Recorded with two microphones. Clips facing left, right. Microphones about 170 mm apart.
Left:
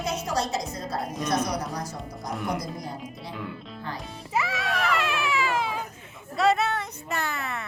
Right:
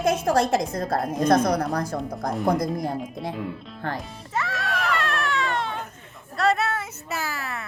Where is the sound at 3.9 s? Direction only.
Centre (ahead or behind).